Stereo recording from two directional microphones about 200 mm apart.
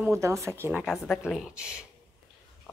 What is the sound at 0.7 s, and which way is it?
A woman's voice, centre (ahead or behind).